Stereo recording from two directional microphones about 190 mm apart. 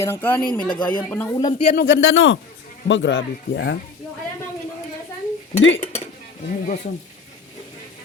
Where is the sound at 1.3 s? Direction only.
20° left (ahead or behind).